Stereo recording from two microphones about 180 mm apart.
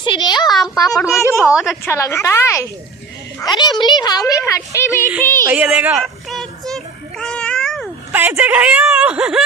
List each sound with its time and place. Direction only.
0.0 s a child's voice: 25° left (ahead or behind)
5.4 s speech: 10° right (ahead or behind)
6.4 s child singing: centre (ahead or behind)
8.1 s speech: 10° right (ahead or behind)